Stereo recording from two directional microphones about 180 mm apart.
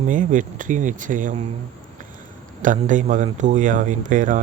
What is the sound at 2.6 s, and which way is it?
Speech, 45° right (ahead or behind).